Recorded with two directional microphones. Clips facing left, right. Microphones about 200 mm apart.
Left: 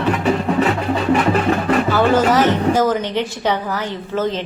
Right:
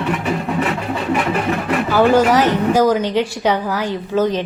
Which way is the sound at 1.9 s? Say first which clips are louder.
Right 4 dB; 10° right (ahead or behind).